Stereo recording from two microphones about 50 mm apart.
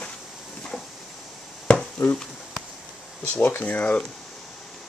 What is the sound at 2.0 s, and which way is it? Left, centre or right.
Speech, left.